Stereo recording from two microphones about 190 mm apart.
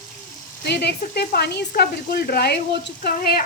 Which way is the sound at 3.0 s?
50° left (ahead or behind).